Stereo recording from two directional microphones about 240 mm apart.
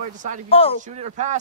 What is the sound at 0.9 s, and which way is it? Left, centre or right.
Speech, right.